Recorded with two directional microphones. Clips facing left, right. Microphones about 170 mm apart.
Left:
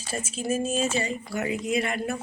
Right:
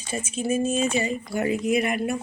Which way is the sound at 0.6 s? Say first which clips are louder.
Right 3 dB; 10° left (ahead or behind).